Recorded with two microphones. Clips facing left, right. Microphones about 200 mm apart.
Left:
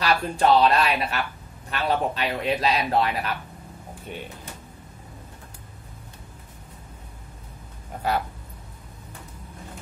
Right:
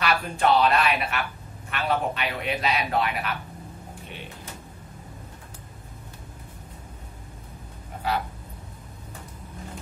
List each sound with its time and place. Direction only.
0.0 s a man's voice: 35° left (ahead or behind)